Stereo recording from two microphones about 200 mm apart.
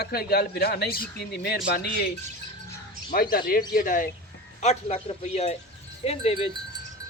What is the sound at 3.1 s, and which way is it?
Speech, 50° left (ahead or behind).